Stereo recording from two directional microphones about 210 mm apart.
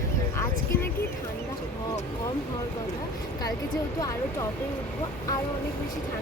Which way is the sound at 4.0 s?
15° left (ahead or behind).